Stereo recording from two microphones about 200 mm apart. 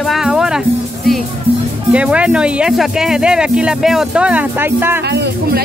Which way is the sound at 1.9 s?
5° right (ahead or behind).